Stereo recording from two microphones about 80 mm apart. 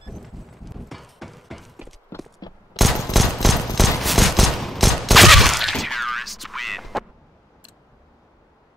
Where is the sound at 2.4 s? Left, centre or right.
Left.